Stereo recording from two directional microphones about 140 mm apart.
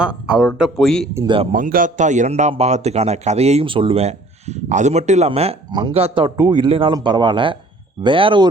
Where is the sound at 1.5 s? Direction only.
75° right (ahead or behind).